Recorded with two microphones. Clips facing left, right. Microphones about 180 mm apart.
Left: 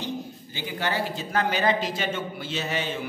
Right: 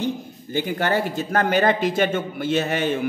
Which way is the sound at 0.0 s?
50° right (ahead or behind).